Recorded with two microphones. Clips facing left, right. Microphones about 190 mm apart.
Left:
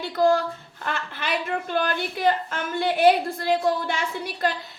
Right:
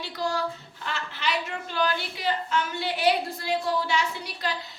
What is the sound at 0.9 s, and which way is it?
A woman's voice, 55° left (ahead or behind).